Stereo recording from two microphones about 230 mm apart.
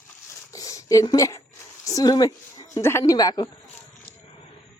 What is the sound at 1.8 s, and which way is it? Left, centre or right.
Speech, centre.